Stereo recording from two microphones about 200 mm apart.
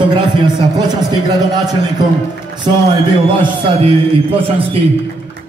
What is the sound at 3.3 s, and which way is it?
Speech, 25° right (ahead or behind).